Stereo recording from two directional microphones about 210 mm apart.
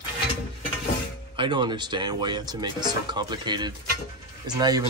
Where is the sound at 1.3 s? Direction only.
20° right (ahead or behind).